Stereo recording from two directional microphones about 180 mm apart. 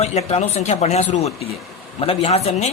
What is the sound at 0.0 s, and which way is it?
A man's voice, 35° left (ahead or behind).